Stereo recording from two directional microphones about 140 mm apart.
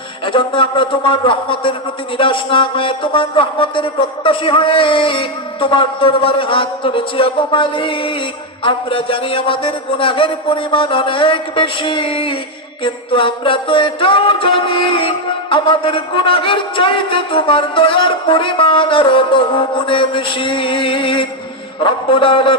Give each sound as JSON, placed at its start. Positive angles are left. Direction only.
{"t": 0.3, "sound": "music", "side_deg": 40}